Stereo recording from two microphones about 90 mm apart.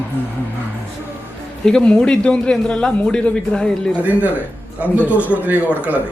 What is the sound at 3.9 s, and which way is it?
Speech, 15° right (ahead or behind).